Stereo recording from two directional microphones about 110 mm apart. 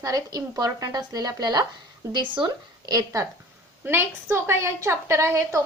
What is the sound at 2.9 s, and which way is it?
A woman's voice, 30° right (ahead or behind).